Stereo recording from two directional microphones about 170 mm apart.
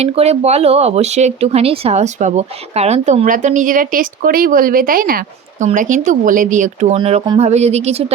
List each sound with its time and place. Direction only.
0.0 s speech: 35° right (ahead or behind)
6.9 s speech: 30° right (ahead or behind)